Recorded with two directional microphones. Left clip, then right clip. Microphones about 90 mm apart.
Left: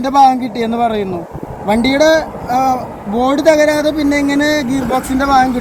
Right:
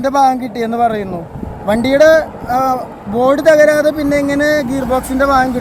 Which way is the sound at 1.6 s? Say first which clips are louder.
Right 2 dB; 60° right (ahead or behind).